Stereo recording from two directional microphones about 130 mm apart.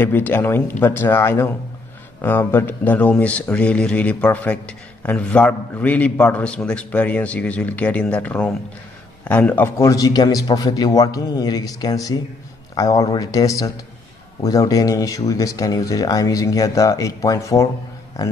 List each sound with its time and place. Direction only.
0.0 s speech: 15° left (ahead or behind)
9.8 s speech: 25° left (ahead or behind)